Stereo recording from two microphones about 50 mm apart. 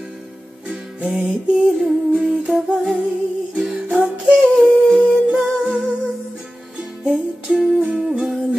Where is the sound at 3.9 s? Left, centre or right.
Centre.